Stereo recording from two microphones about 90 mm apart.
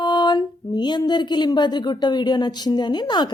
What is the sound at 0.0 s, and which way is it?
Speech, 55° left (ahead or behind).